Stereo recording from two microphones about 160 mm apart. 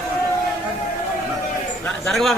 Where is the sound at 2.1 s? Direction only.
Centre (ahead or behind).